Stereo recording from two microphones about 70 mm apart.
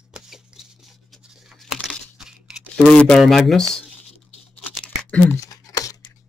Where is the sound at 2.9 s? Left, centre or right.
Centre.